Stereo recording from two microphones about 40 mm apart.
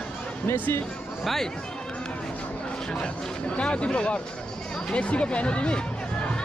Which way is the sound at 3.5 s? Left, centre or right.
Left.